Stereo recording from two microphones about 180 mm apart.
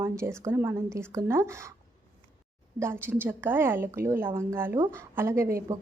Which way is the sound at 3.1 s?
10° right (ahead or behind).